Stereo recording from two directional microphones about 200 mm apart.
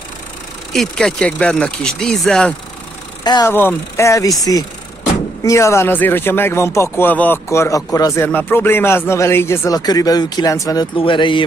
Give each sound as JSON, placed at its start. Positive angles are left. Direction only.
{"t": 0.7, "sound": "speech", "side_deg": 5}
{"t": 3.3, "sound": "speech", "side_deg": 15}